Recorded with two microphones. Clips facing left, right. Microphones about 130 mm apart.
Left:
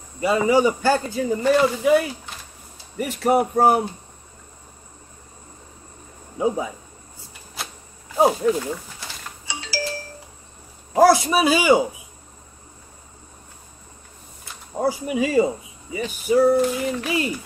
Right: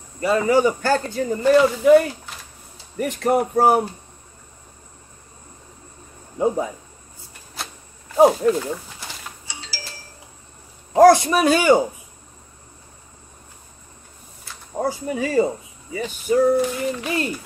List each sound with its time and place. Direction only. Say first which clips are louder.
0.2 s a man's voice: even; 15° left (ahead or behind); by 3.8 s centre (ahead or behind)
6.3 s speech: right 2 dB; 5° left (ahead or behind)
8.2 s speech: right 3 dB; centre (ahead or behind)
9.5 s music: left 14 dB; 65° left (ahead or behind)
11.0 s a man's voice: right 3 dB; 5° left (ahead or behind)
14.4 s a man's voice: left 1 dB; 10° left (ahead or behind)